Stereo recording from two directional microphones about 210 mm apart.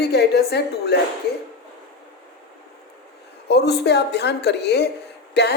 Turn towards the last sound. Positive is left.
turn(degrees=50)  # may be behind; listen again after turning